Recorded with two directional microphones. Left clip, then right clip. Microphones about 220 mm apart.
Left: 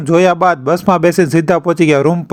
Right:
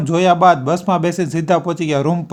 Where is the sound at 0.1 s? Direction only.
30° left (ahead or behind).